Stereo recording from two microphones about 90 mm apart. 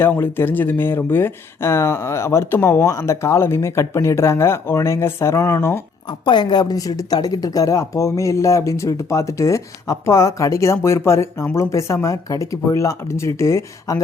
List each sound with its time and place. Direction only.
0.0 s a woman's voice: 25° left (ahead or behind)
6.1 s a woman's voice: 60° left (ahead or behind); by 14.0 s 35° left (ahead or behind)